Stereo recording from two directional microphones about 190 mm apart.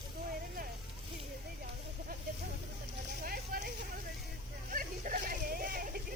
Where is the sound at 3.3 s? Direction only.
50° right (ahead or behind).